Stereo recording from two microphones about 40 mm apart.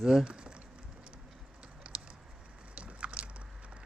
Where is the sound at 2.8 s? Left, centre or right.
Right.